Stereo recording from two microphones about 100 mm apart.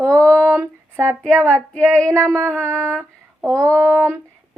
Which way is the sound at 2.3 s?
25° right (ahead or behind).